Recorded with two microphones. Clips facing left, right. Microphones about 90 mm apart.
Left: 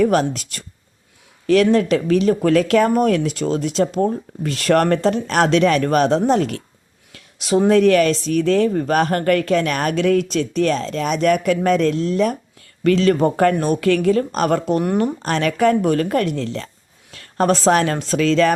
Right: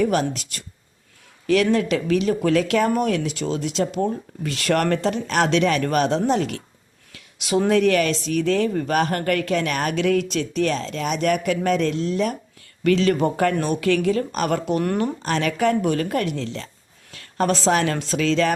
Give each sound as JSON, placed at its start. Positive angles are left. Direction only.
{"t": 0.0, "sound": "speech", "side_deg": 45}
{"t": 7.1, "sound": "a sound", "side_deg": 35}
{"t": 7.7, "sound": "speech", "side_deg": 40}
{"t": 14.8, "sound": "speech", "side_deg": 20}
{"t": 15.2, "sound": "a woman's voice", "side_deg": 45}